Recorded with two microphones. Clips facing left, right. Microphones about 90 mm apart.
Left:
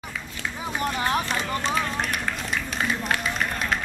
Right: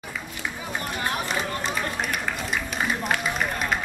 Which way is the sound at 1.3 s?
5° right (ahead or behind).